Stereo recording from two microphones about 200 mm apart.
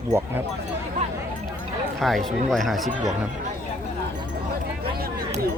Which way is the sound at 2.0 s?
Centre (ahead or behind).